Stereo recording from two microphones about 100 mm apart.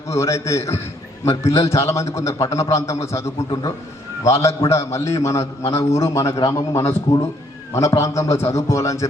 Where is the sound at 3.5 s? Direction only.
40° left (ahead or behind).